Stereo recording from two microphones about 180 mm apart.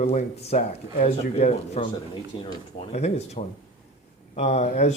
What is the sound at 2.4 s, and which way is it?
Speech, 30° left (ahead or behind).